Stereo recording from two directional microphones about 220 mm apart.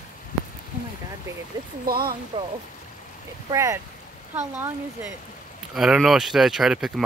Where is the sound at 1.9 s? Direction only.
40° right (ahead or behind).